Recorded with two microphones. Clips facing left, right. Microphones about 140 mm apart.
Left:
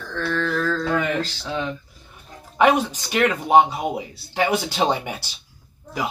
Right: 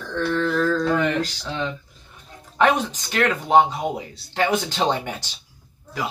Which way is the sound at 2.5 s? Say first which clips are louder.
Left 2 dB; 10° left (ahead or behind).